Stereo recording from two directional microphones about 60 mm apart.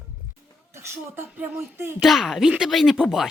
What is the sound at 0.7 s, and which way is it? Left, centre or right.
A woman's voice, right.